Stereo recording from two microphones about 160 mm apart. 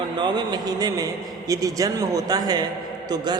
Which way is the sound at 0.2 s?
25° right (ahead or behind).